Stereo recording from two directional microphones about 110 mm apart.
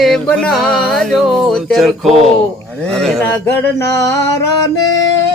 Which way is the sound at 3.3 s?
20° left (ahead or behind).